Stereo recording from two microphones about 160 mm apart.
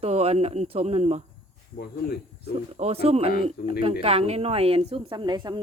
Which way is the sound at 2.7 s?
40° right (ahead or behind).